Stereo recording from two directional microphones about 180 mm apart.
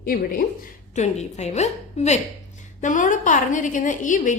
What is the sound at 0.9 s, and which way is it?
A woman's voice, 40° left (ahead or behind).